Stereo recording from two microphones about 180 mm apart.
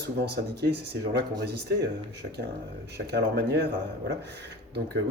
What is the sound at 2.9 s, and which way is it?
Speech, 65° right (ahead or behind).